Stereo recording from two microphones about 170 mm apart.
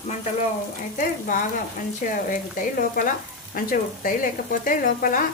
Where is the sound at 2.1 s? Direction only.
50° left (ahead or behind).